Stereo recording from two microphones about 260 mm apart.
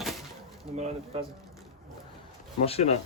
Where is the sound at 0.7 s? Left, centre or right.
Right.